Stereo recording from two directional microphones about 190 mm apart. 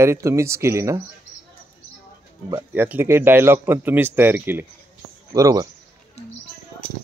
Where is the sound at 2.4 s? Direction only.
15° right (ahead or behind).